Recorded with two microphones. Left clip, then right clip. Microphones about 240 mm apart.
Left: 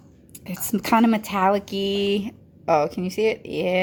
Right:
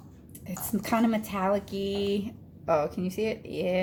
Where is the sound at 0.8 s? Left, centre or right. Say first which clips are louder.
Left 8 dB; left.